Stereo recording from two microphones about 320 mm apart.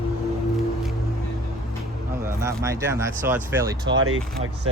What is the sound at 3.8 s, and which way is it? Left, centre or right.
Speech, right.